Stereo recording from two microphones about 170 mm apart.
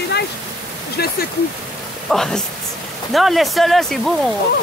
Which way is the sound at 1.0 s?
70° left (ahead or behind).